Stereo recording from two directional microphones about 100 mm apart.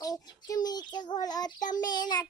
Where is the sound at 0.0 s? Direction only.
40° left (ahead or behind).